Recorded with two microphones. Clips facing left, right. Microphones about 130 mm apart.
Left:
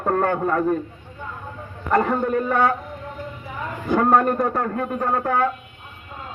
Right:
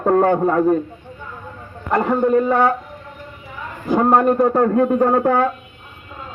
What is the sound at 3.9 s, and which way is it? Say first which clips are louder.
A man's voice: right 3 dB; 25° right (ahead or behind).